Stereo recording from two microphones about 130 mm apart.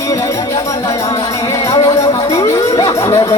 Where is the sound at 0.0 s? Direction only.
25° left (ahead or behind).